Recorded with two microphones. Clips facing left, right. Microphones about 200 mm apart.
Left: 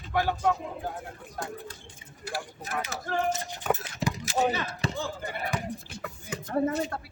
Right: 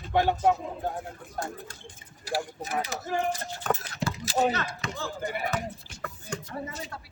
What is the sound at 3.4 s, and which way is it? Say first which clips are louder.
Speech: left 1 dB; 15° left (ahead or behind).